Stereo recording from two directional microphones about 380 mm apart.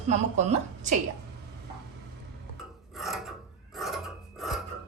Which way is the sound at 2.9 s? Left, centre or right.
Centre.